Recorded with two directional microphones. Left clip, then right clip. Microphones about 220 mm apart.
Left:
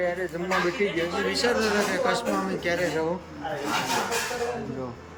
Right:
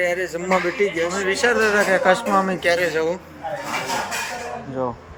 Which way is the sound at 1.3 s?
20° right (ahead or behind).